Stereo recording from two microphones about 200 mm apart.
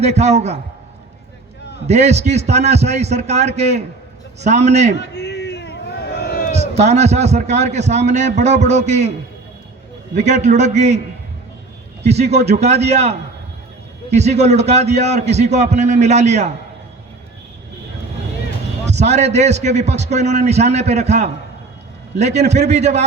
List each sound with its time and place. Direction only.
0.0 s a man's voice: 35° right (ahead or behind)
1.9 s a man's voice: 35° right (ahead or behind)
4.9 s a sound: 55° left (ahead or behind)
6.5 s a man's voice: 35° right (ahead or behind)
10.2 s a man's voice: 35° right (ahead or behind)
12.0 s a man's voice: 35° right (ahead or behind)
18.9 s a man's voice: 35° right (ahead or behind)